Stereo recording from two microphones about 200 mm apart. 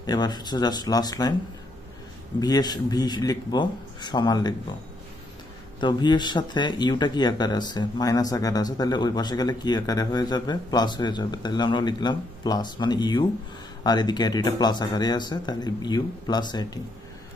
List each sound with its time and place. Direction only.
0.0 s speech: 20° left (ahead or behind)
2.4 s speech: 20° left (ahead or behind)
5.8 s speech: 20° left (ahead or behind)